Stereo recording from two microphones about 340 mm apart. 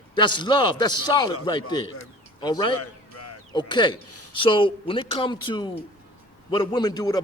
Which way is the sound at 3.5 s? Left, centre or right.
Centre.